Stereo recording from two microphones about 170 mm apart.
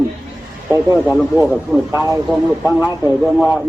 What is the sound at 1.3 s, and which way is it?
Speech, 10° right (ahead or behind).